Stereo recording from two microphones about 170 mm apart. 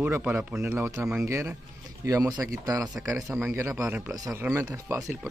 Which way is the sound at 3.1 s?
5° right (ahead or behind).